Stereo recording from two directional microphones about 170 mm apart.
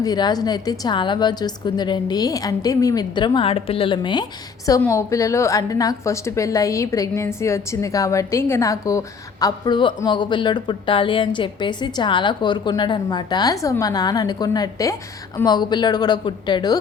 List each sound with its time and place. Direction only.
0.0 s a woman's voice: 25° left (ahead or behind)